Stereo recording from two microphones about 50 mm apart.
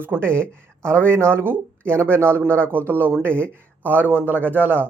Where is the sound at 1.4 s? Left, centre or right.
Right.